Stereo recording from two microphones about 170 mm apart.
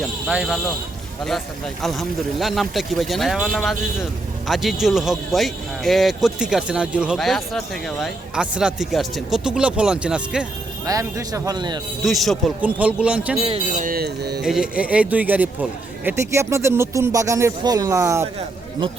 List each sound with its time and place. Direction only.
0.0 s speech: centre (ahead or behind)
10.8 s speech: 20° right (ahead or behind)
12.0 s speech: centre (ahead or behind)
13.7 s speech: 55° right (ahead or behind); by 14.4 s 70° right (ahead or behind)
14.4 s speech: 5° right (ahead or behind)